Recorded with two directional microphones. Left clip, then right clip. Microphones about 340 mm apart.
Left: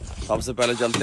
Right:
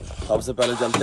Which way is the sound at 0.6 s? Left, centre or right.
Centre.